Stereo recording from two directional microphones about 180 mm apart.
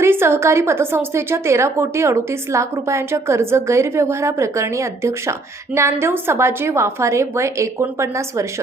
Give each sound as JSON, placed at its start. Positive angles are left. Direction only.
{"t": 0.0, "sound": "a woman's voice", "side_deg": -15}